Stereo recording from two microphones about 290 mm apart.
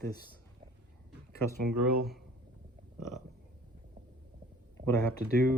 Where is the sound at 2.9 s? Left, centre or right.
Centre.